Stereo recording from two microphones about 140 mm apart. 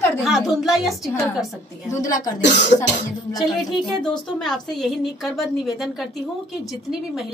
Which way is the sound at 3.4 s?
Centre (ahead or behind).